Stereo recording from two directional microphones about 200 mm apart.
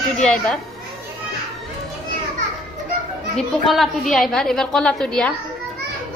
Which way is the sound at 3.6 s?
Centre (ahead or behind).